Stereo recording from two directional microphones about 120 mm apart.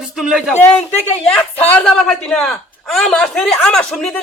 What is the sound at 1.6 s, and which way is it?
A man's voice, 10° left (ahead or behind).